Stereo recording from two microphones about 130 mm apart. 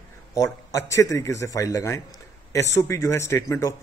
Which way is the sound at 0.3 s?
25° left (ahead or behind).